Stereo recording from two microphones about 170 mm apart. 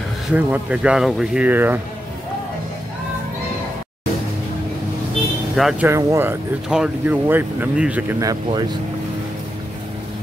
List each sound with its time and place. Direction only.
0.3 s speech: 10° right (ahead or behind)
5.6 s speech: centre (ahead or behind)
5.9 s speech: 15° right (ahead or behind)
8.5 s speech: 25° right (ahead or behind)